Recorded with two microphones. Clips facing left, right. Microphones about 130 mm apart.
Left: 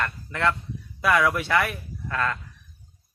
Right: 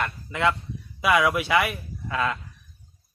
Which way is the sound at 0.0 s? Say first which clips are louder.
Right 1 dB; 10° right (ahead or behind).